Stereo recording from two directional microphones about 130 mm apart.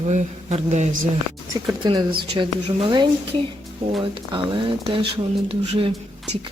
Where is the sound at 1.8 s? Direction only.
35° right (ahead or behind).